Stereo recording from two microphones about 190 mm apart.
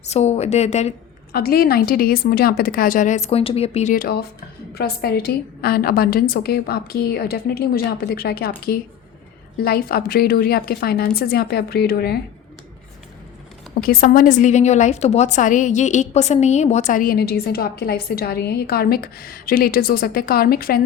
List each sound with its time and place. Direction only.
0.0 s a woman's voice: 35° left (ahead or behind)
1.3 s a woman's voice: 55° left (ahead or behind); by 3.9 s 35° left (ahead or behind)
3.9 s a woman's voice: 55° left (ahead or behind)
13.7 s a woman's voice: 50° left (ahead or behind)